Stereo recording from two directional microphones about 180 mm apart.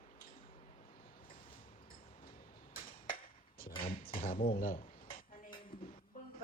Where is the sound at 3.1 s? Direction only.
55° left (ahead or behind).